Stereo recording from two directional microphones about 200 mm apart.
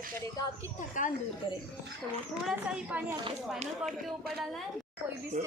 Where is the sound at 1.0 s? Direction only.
40° left (ahead or behind).